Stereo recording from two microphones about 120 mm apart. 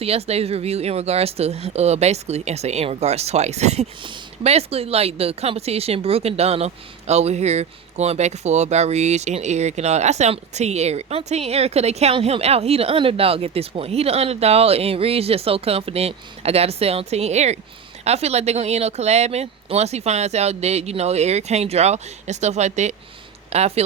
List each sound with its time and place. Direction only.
0.0 s speech: 55° right (ahead or behind)
23.5 s speech: 60° right (ahead or behind)